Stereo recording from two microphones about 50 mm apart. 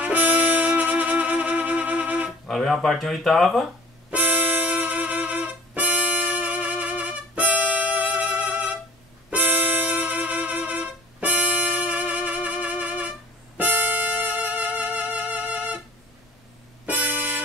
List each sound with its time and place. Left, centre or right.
0.0 s music: right
2.4 s speech: centre
4.1 s music: right
16.8 s music: right